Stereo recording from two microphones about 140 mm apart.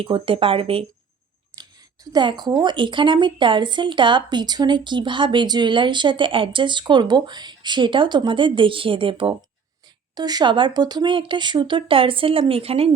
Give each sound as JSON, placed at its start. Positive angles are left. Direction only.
{"t": 0.0, "sound": "speech", "side_deg": -40}
{"t": 1.5, "sound": "speech", "side_deg": -30}
{"t": 10.2, "sound": "speech", "side_deg": -30}